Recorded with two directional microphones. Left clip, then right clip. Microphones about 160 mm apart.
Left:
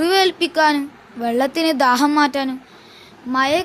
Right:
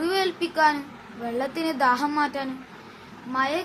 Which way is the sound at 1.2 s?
90° left.